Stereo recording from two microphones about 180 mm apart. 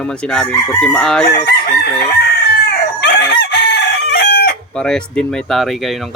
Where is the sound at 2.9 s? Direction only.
70° left (ahead or behind).